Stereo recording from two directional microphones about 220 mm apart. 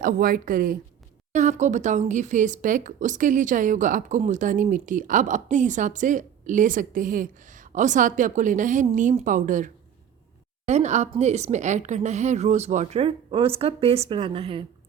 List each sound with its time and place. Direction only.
0.0 s a woman's voice: 40° right (ahead or behind)